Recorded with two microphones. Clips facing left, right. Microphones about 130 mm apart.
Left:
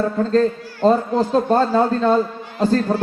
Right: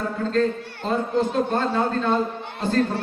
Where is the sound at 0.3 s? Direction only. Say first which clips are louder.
Left 4 dB; 35° left (ahead or behind).